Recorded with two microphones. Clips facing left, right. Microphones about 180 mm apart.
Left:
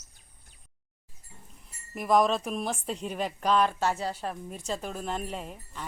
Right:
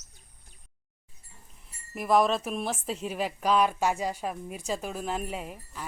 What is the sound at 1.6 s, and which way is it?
Speech, centre (ahead or behind).